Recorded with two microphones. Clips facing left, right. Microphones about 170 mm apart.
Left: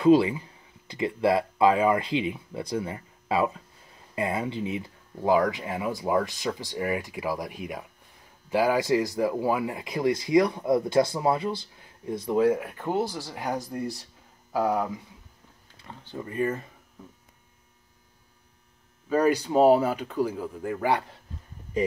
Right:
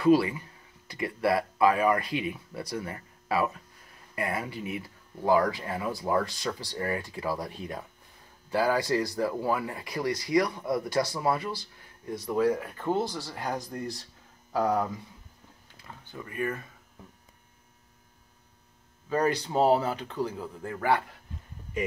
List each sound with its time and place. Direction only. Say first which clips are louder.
0.0 s speech: left 3 dB; 20° left (ahead or behind)
16.1 s speech: left 5 dB; 25° left (ahead or behind)
19.0 s speech: left 4 dB; 10° left (ahead or behind)